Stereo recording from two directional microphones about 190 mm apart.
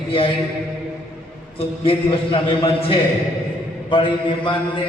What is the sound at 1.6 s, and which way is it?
Mantra, 30° left (ahead or behind).